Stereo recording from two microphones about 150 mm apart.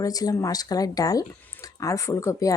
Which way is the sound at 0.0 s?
25° left (ahead or behind).